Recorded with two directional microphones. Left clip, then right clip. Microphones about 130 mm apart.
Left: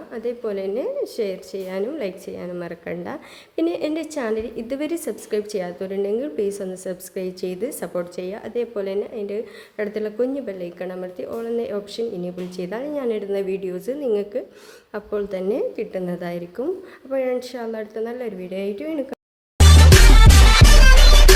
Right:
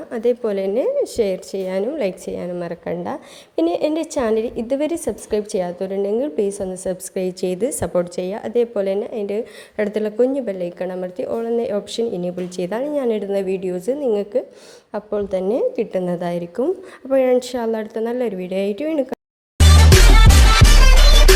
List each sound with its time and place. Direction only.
0.1 s a woman's voice: 50° right (ahead or behind)
2.5 s a woman's voice: 25° right (ahead or behind)
4.7 s a woman's voice: 20° right (ahead or behind)
6.8 s a woman's voice: 40° right (ahead or behind)
11.9 s a woman's voice: 50° right (ahead or behind); by 15.6 s 25° right (ahead or behind)
15.7 s a woman's voice: 40° right (ahead or behind)
17.1 s a woman's voice: 50° right (ahead or behind)
19.1 s music: centre (ahead or behind)